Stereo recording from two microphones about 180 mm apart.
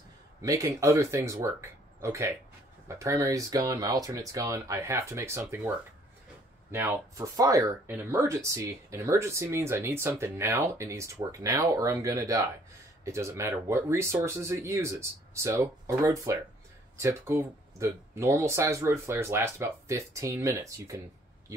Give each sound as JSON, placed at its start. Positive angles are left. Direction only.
{"t": 0.4, "sound": "speech", "side_deg": -15}